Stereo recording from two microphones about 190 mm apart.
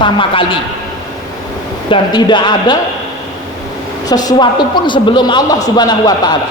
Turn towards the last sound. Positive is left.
turn(degrees=20)  # may be behind; listen again after turning